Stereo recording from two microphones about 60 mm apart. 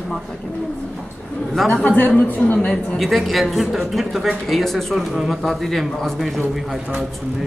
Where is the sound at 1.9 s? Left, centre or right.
Left.